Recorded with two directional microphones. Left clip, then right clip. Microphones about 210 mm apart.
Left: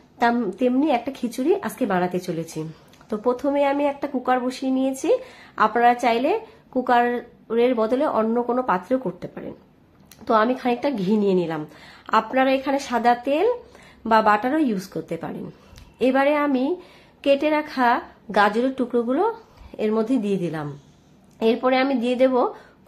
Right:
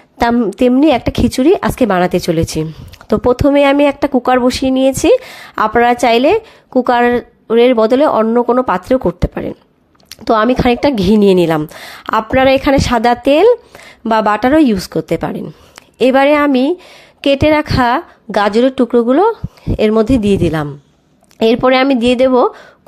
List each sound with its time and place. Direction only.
0.4 s speech: 45° right (ahead or behind)